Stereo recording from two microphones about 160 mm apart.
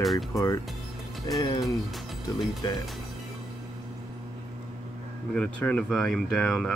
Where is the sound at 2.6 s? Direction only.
30° left (ahead or behind).